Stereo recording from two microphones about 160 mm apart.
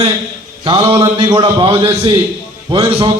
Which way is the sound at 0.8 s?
35° right (ahead or behind).